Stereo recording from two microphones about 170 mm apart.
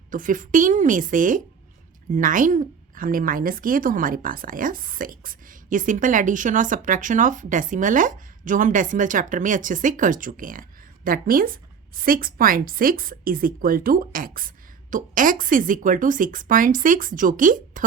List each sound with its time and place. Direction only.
0.1 s a woman's voice: 50° right (ahead or behind)